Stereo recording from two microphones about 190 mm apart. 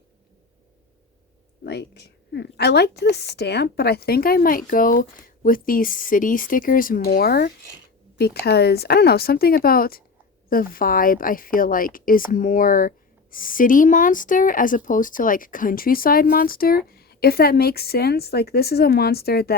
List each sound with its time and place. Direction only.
1.6 s speech: 60° left (ahead or behind)